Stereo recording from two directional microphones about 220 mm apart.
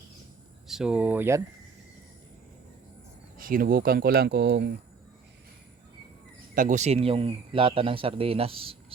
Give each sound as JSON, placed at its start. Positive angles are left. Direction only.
{"t": 0.7, "sound": "speech", "side_deg": -5}
{"t": 3.3, "sound": "speech", "side_deg": -40}
{"t": 6.5, "sound": "a man's voice", "side_deg": -40}